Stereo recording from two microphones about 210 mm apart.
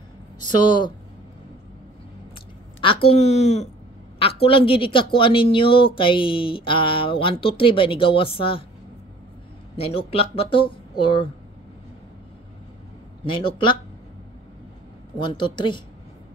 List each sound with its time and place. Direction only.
0.6 s speech: 20° left (ahead or behind)
2.8 s a woman's voice: 25° left (ahead or behind)
9.8 s speech: 25° left (ahead or behind)
13.2 s speech: 25° left (ahead or behind)
15.1 s speech: 20° left (ahead or behind)